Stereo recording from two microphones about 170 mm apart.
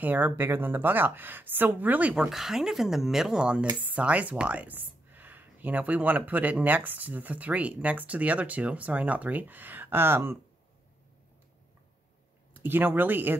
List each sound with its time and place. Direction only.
0.0 s speech: 10° right (ahead or behind)
12.6 s speech: 10° right (ahead or behind)